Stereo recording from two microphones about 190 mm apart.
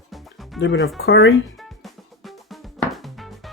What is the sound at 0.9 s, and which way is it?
Speech, 60° left (ahead or behind).